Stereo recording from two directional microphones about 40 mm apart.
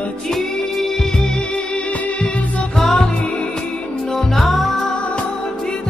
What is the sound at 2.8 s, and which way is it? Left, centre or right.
Music, centre.